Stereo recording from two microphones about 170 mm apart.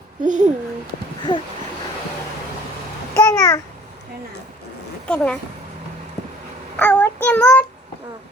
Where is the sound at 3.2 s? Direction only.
15° left (ahead or behind).